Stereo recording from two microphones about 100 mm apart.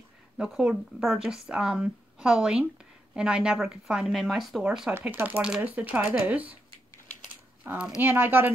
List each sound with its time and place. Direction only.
0.4 s speech: 5° right (ahead or behind)
5.0 s speech: 15° right (ahead or behind)
7.6 s speech: 10° right (ahead or behind)